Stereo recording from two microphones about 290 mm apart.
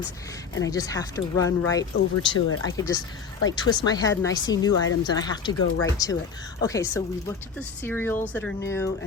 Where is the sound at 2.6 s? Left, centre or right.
Centre.